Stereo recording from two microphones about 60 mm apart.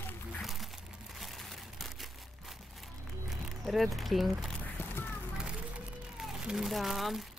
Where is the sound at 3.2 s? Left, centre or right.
Centre.